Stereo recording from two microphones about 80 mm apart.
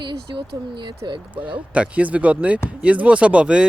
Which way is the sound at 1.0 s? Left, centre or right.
Right.